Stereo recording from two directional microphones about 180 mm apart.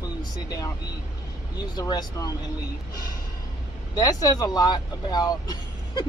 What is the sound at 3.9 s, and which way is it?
Speech, 20° left (ahead or behind).